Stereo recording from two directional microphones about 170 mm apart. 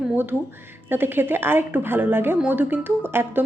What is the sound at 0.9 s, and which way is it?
A woman's voice, 10° right (ahead or behind).